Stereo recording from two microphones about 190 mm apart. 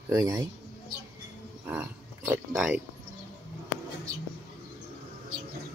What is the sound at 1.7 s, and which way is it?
Speech, 10° right (ahead or behind).